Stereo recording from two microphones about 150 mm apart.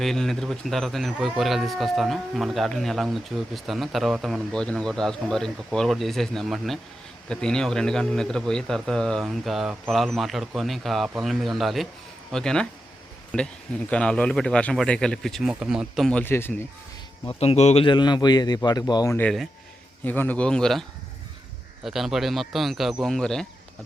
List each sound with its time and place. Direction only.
0.0 s speech: centre (ahead or behind)
16.2 s speech: 15° left (ahead or behind)
17.2 s speech: 45° left (ahead or behind)
17.8 s a man's voice: 30° left (ahead or behind)
20.1 s speech: 10° left (ahead or behind)
21.8 s speech: centre (ahead or behind)